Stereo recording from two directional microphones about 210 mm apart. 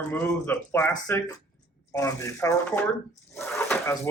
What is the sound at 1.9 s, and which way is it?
Speech, 15° left (ahead or behind).